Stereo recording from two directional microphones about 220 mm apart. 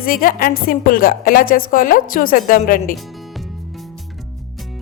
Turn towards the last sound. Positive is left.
turn(degrees=0)  # may be behind; listen again after turning